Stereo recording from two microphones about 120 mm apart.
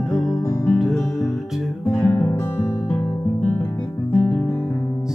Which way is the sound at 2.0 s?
15° left (ahead or behind).